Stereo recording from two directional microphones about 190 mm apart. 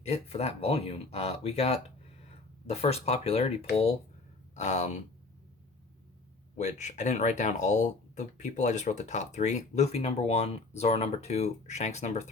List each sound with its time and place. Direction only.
0.0 s speech: 35° left (ahead or behind)
6.6 s speech: 40° left (ahead or behind)